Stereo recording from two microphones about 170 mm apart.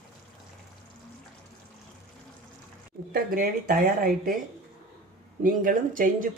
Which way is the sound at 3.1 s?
55° right (ahead or behind).